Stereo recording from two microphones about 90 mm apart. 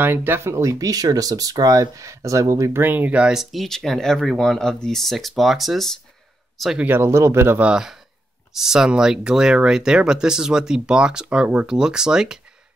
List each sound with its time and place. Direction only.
0.0 s speech: 25° right (ahead or behind); by 5.9 s centre (ahead or behind)
6.8 s speech: 25° right (ahead or behind)
7.6 s speech: 5° right (ahead or behind)